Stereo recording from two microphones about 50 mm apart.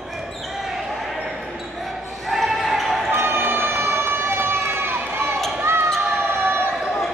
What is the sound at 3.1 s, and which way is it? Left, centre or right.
Run, right.